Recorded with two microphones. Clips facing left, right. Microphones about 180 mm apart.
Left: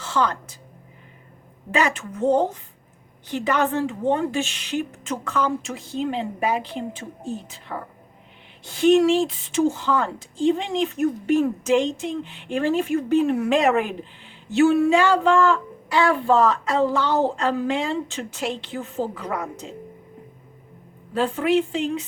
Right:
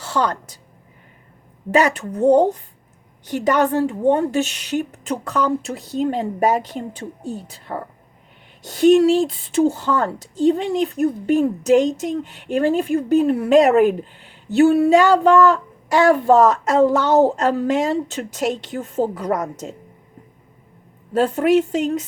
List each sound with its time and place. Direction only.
0.0 s a woman's voice: 40° right (ahead or behind)
1.7 s speech: 40° right (ahead or behind)
3.2 s speech: 40° right (ahead or behind)
21.1 s speech: 40° right (ahead or behind)